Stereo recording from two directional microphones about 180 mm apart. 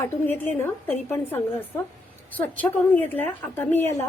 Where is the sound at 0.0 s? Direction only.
10° left (ahead or behind).